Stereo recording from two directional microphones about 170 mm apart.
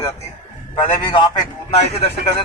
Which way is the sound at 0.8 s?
30° left (ahead or behind).